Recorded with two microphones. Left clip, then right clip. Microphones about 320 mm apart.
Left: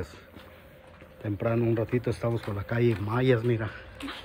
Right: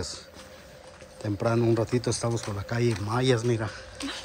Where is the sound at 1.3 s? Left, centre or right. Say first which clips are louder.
Right 2 dB; centre.